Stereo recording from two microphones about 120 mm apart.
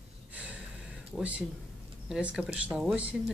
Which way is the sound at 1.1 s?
10° right (ahead or behind).